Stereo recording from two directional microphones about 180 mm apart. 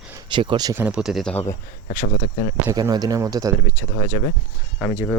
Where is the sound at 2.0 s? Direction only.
45° left (ahead or behind).